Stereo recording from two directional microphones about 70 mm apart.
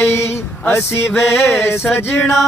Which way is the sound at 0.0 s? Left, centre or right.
Left.